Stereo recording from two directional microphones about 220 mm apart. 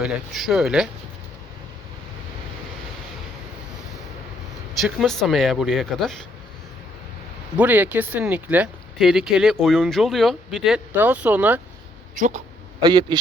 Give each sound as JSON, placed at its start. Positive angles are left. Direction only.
{"t": 0.0, "sound": "speech", "side_deg": 0}
{"t": 4.8, "sound": "speech", "side_deg": 0}
{"t": 7.5, "sound": "speech", "side_deg": -5}
{"t": 12.8, "sound": "a man's voice", "side_deg": -20}